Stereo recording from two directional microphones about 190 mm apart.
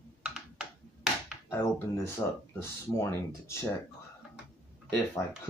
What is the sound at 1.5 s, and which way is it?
Speech, 15° left (ahead or behind).